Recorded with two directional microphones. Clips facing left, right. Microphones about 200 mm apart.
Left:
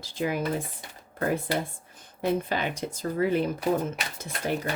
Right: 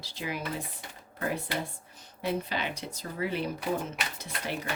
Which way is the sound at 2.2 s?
50° left (ahead or behind).